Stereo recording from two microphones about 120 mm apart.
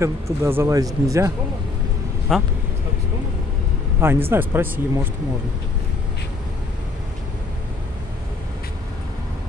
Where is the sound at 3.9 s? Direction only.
20° right (ahead or behind).